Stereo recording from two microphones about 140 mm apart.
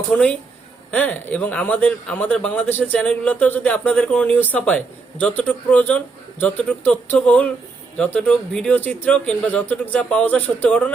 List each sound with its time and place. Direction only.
0.1 s speech: 10° left (ahead or behind)